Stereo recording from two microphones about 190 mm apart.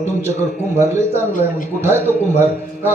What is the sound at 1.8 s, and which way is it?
A man's voice, 10° right (ahead or behind).